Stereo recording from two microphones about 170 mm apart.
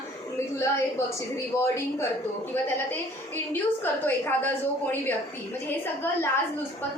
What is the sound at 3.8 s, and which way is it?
A woman's voice, 10° left (ahead or behind).